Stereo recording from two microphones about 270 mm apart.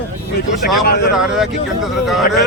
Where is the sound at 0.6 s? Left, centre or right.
Left.